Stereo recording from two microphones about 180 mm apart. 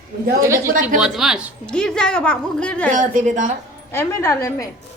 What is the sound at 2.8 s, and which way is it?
Speech, 45° right (ahead or behind).